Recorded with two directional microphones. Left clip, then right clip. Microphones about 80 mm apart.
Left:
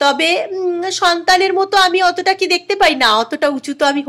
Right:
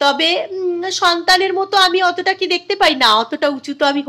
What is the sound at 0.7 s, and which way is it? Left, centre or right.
A woman's voice, left.